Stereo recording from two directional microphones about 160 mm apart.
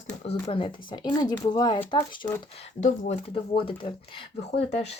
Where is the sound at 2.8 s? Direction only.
45° left (ahead or behind).